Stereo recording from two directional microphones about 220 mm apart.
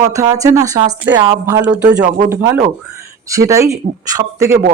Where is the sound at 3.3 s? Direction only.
15° right (ahead or behind).